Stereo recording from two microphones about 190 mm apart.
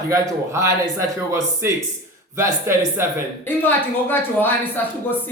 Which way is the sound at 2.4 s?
10° right (ahead or behind).